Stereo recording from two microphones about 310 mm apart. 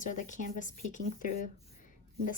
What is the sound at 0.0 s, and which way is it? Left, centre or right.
Speech, left.